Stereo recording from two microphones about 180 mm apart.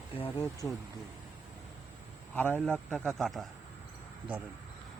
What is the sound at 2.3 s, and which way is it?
A man's voice, 10° left (ahead or behind).